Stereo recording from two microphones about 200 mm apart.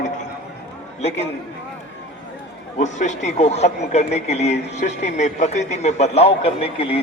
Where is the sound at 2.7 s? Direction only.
35° left (ahead or behind).